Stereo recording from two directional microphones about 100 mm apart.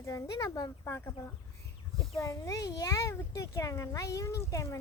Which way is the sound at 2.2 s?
35° left (ahead or behind).